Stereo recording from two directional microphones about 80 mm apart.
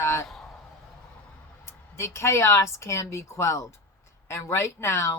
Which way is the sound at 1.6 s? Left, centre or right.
Left.